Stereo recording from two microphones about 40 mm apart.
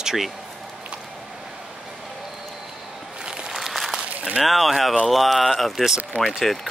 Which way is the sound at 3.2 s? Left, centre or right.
Right.